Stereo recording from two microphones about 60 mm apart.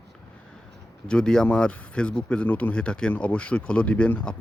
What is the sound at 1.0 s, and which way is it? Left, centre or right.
Speech, centre.